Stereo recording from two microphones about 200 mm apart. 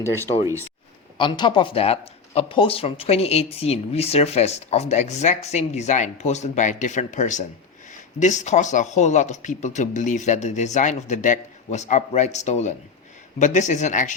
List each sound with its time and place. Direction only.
1.2 s speech: 25° left (ahead or behind)